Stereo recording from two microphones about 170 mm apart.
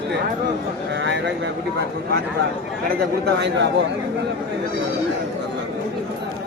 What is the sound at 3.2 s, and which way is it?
Speech, 90° right.